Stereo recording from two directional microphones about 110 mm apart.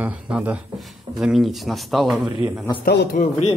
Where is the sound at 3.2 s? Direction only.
75° left (ahead or behind).